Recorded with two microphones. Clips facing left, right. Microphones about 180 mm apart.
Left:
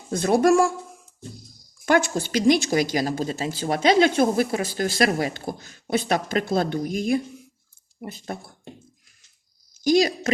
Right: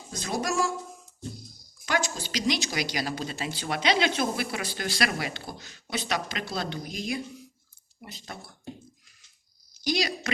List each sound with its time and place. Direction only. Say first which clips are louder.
0.1 s speech: left 12 dB; 55° left (ahead or behind)
1.8 s a woman's voice: left 9 dB; 55° left (ahead or behind)
9.8 s a woman's voice: left 9 dB; 45° left (ahead or behind)